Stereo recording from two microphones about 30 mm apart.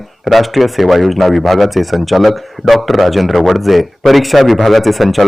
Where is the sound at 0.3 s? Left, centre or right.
Centre.